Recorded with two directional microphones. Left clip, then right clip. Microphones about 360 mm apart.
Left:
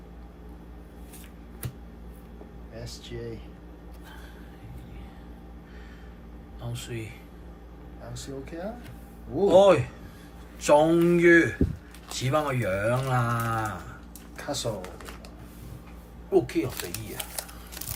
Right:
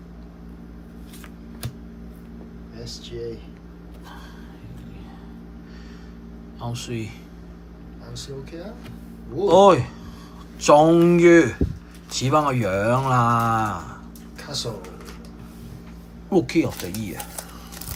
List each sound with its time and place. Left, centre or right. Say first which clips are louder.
2.8 s speech: right 7 dB; centre
6.7 s a man's voice: right 6 dB; centre
9.5 s speech: right 4 dB; centre
14.3 s a sound: right 1 dB; left
16.3 s a man's voice: right 4 dB; centre